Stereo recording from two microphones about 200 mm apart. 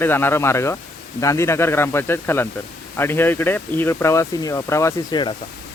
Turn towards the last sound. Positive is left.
turn(degrees=20)  # may be behind; listen again after turning